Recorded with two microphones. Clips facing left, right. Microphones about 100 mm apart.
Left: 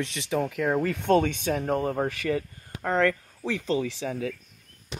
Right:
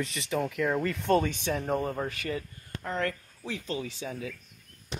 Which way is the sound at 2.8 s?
85° left.